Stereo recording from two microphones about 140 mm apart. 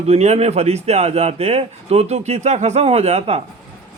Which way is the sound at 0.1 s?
50° right (ahead or behind).